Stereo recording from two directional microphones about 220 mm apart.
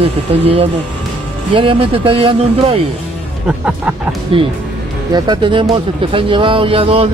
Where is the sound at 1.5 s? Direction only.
25° right (ahead or behind).